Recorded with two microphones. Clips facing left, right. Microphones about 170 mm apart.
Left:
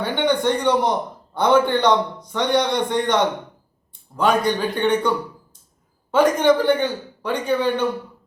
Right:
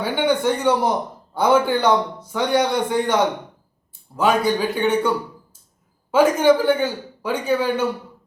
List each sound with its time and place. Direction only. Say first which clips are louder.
0.0 s a man's voice: even; 5° right (ahead or behind)